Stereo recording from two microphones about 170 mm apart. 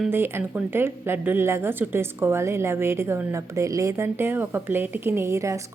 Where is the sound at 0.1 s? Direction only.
15° right (ahead or behind).